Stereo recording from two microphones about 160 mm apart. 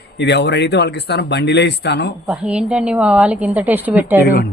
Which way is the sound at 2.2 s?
5° right (ahead or behind).